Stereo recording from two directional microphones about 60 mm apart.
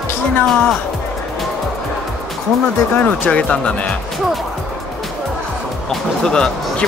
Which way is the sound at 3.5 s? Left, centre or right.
Centre.